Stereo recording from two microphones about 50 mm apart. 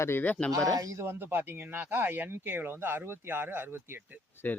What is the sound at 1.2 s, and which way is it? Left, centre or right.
Speech, right.